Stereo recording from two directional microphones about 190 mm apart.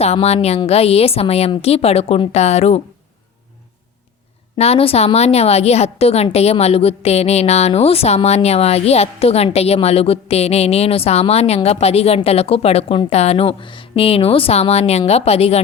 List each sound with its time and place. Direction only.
0.0 s a woman's voice: 35° left (ahead or behind)
4.5 s a woman's voice: 30° left (ahead or behind)